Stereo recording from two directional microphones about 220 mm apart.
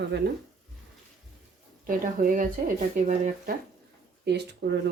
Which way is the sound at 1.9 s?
40° right (ahead or behind).